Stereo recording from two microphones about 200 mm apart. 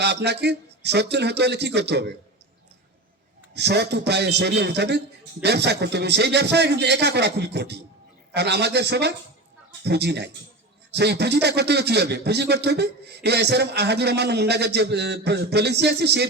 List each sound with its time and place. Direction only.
0.0 s a man's voice: 55° right (ahead or behind)
3.5 s a man's voice: 55° right (ahead or behind)